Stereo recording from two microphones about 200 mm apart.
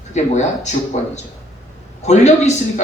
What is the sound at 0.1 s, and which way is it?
Speech, 35° left (ahead or behind).